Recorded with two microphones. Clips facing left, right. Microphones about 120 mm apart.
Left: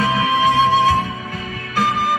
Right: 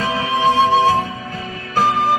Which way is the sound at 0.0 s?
30° right (ahead or behind).